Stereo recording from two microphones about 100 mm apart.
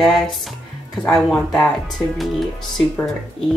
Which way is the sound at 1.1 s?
Centre (ahead or behind).